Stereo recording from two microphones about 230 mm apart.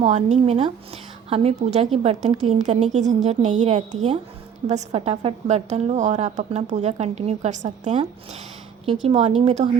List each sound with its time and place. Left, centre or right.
0.0 s a woman's voice: right